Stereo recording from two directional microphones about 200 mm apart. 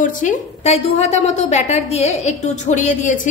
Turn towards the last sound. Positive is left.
turn(degrees=40)  # may be behind; listen again after turning